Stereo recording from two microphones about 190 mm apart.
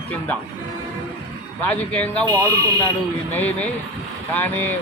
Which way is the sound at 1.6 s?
10° left (ahead or behind).